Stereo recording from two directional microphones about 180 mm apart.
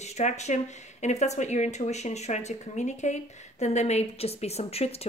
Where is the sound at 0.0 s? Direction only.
40° left (ahead or behind).